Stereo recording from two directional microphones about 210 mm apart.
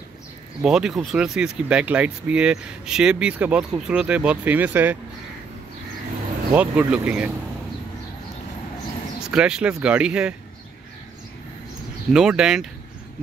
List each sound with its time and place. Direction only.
0.6 s speech: 5° right (ahead or behind)
6.5 s speech: 5° right (ahead or behind)
9.3 s speech: 5° right (ahead or behind)
12.1 s speech: 5° right (ahead or behind)